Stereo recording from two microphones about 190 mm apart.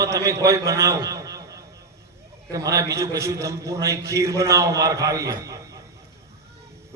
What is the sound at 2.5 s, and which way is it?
A man's voice, 15° right (ahead or behind).